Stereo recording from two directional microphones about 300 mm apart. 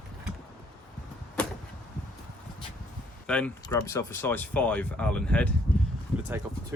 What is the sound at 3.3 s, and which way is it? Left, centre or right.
Speech, centre.